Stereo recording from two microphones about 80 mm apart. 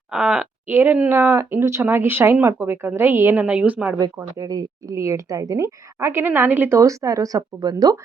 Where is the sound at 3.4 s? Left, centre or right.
Centre.